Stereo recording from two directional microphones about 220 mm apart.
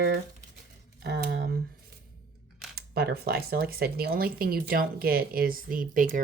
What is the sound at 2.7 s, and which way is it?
Speech, 45° right (ahead or behind).